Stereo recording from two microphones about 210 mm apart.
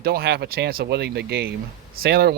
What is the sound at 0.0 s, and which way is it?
Speech, 45° right (ahead or behind).